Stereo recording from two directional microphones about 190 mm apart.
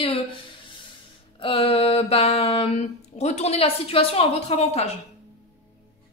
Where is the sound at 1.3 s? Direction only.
30° left (ahead or behind).